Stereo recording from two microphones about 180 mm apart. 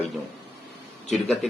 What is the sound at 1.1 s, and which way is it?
Speech, centre (ahead or behind).